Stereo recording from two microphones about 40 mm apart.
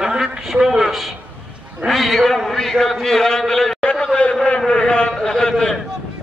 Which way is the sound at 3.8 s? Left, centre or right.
Left.